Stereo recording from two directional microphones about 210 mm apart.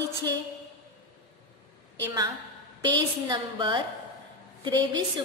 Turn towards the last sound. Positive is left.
turn(degrees=-25)  # may be behind; listen again after turning